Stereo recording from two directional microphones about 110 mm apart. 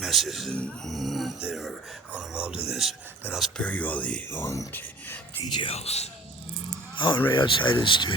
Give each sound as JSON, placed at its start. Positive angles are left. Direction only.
{"t": 0.0, "sound": "speech", "side_deg": 0}
{"t": 0.9, "sound": "speech", "side_deg": 0}
{"t": 3.6, "sound": "speech", "side_deg": 15}
{"t": 5.5, "sound": "speech", "side_deg": 45}
{"t": 5.7, "sound": "speech", "side_deg": 70}
{"t": 6.9, "sound": "speech", "side_deg": 50}